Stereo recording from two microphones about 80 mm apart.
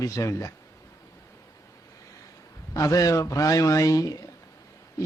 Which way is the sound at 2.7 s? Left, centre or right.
Left.